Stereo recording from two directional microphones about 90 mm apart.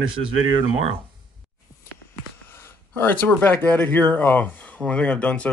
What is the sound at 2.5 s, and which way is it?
Speech, 25° left (ahead or behind).